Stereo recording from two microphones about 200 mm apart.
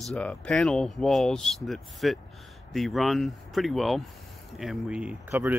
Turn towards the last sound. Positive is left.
turn(degrees=-10)  # may be behind; listen again after turning